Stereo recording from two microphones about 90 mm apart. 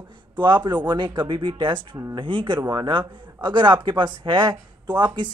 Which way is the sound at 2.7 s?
50° right (ahead or behind).